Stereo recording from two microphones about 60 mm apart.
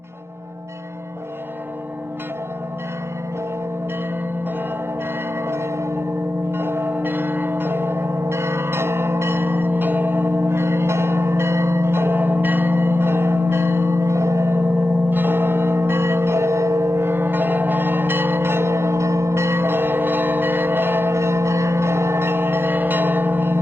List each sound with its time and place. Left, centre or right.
5.5 s bell: right
6.5 s church bell: right
15.1 s tubular bells: right